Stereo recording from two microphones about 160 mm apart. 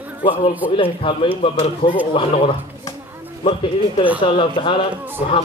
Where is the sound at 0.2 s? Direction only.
30° left (ahead or behind).